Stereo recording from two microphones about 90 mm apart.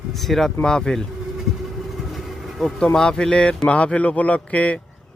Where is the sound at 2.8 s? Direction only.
10° left (ahead or behind).